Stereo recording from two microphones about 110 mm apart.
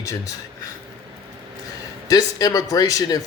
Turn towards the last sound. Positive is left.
turn(degrees=35)  # may be behind; listen again after turning